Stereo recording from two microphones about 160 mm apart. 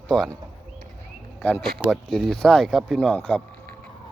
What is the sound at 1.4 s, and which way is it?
Speech, 10° left (ahead or behind).